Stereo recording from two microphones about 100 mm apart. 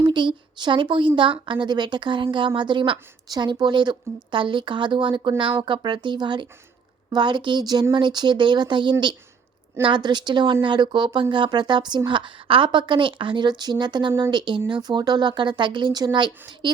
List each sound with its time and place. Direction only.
0.0 s speech: 55° right (ahead or behind)